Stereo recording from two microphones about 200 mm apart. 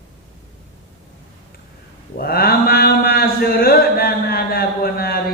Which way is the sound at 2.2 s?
50° left (ahead or behind).